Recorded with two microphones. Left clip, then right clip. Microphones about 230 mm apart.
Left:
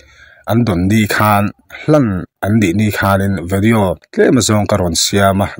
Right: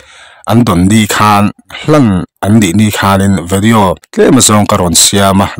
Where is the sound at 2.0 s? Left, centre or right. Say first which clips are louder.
Right 6 dB; right.